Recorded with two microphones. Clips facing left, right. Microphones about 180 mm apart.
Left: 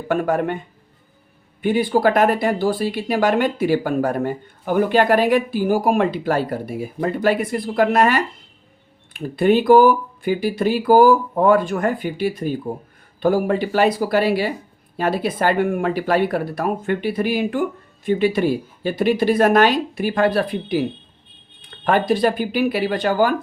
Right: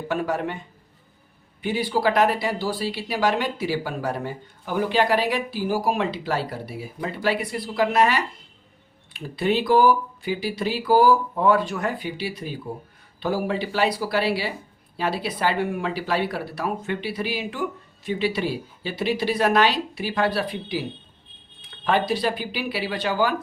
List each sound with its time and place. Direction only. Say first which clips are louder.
0.1 s speech: left 6 dB; 50° left (ahead or behind)
1.6 s speech: left 6 dB; 50° left (ahead or behind)